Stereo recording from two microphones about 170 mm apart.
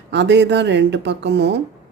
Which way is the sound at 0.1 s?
90° right.